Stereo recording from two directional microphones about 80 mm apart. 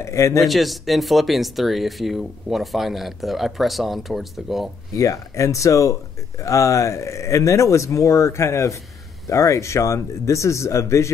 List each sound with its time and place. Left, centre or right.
0.0 s speech: left
0.4 s speech: centre
4.9 s speech: left